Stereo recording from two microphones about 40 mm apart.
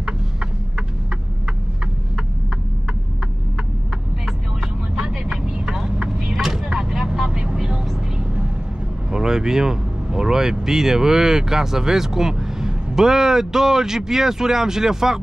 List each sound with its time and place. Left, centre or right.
5.1 s vehicle: centre
9.1 s speech: centre